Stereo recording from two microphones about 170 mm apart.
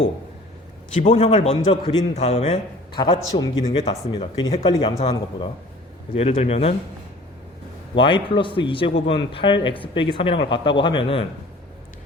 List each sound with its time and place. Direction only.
1.0 s a man's voice: 35° left (ahead or behind)
1.7 s a man's voice: 25° left (ahead or behind)
2.1 s a man's voice: 40° left (ahead or behind)
3.0 s a man's voice: 25° left (ahead or behind)
6.1 s a man's voice: 40° left (ahead or behind)
7.9 s a man's voice: 30° left (ahead or behind)